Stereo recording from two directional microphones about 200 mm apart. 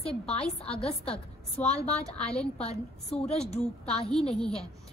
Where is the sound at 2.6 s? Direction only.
30° left (ahead or behind).